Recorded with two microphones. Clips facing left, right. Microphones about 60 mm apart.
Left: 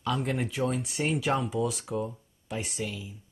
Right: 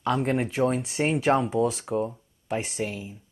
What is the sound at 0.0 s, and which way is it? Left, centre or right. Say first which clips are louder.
Speech: right 5 dB; right.